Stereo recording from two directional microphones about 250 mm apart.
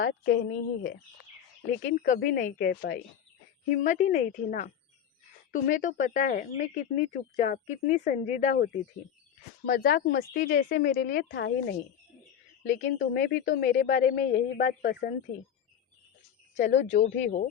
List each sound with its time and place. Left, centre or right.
0.0 s speech: left
16.6 s speech: left